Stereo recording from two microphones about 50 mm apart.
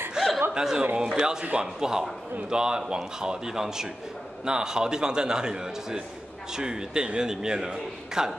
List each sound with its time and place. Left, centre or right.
0.2 s chuckle: centre
0.6 s a man's voice: centre